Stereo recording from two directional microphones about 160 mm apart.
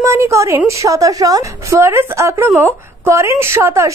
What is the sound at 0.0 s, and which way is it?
A woman's voice, 15° right (ahead or behind).